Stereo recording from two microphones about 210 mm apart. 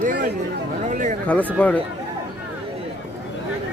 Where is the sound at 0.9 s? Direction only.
35° right (ahead or behind).